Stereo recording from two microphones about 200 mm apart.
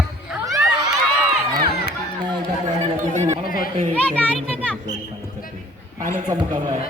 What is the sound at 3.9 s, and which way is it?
Speech, 5° left (ahead or behind).